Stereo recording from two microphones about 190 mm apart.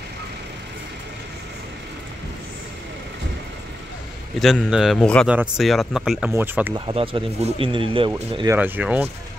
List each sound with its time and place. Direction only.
4.4 s speech: centre (ahead or behind)
6.9 s speech: 30° right (ahead or behind)
8.5 s speech: 10° right (ahead or behind)